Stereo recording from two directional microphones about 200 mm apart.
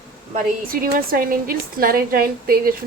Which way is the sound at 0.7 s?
45° right (ahead or behind).